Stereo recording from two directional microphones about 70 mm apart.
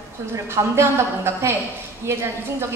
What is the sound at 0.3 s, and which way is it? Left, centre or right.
A woman's voice, right.